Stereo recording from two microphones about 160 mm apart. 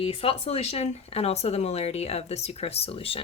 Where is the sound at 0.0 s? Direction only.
35° left (ahead or behind).